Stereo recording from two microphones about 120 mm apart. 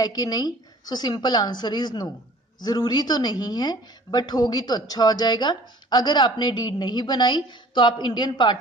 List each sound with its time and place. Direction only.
0.0 s speech: 35° left (ahead or behind)